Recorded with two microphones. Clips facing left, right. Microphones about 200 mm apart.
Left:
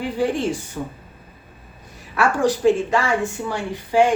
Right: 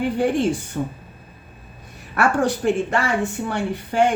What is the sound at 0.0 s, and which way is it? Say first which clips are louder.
Speech: right 2 dB; 55° right (ahead or behind).